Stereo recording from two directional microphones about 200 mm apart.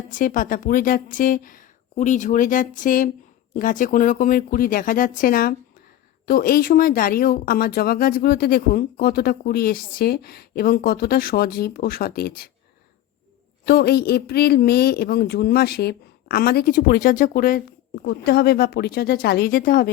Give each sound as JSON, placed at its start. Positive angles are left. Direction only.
{"t": 0.1, "sound": "speech", "side_deg": 45}
{"t": 13.7, "sound": "speech", "side_deg": 50}
{"t": 18.0, "sound": "speech", "side_deg": 55}